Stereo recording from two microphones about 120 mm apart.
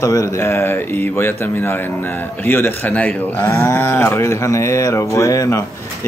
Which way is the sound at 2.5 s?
20° left (ahead or behind).